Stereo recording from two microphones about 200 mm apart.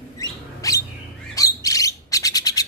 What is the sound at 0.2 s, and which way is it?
Bird, 15° left (ahead or behind).